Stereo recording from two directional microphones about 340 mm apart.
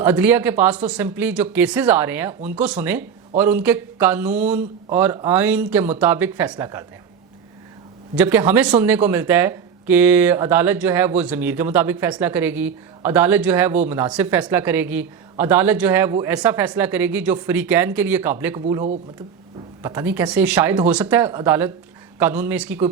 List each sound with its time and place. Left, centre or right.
0.0 s speech: centre
8.1 s speech: centre
18.7 s speech: centre
19.8 s speech: centre